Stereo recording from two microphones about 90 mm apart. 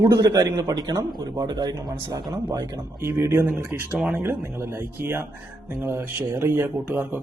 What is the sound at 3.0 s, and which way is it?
Speech, 30° right (ahead or behind).